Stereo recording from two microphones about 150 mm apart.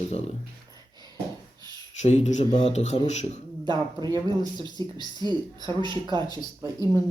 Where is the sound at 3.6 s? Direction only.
30° right (ahead or behind).